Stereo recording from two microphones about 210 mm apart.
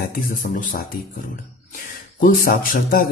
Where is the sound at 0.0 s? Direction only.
40° left (ahead or behind).